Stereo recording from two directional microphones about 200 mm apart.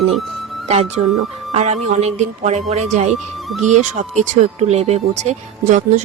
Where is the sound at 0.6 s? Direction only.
30° right (ahead or behind).